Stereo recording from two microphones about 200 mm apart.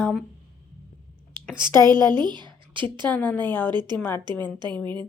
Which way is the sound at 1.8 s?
20° right (ahead or behind).